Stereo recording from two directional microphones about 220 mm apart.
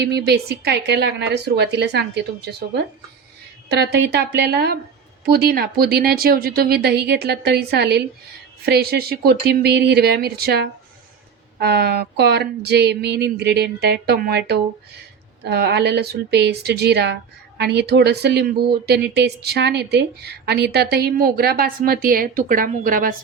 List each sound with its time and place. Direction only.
0.0 s speech: 45° right (ahead or behind)
3.7 s speech: 50° right (ahead or behind)